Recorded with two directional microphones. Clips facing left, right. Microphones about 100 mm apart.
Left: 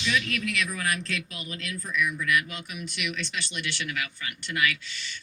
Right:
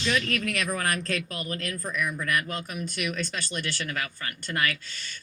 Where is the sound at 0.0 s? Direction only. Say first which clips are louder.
Right 1 dB; 50° right (ahead or behind).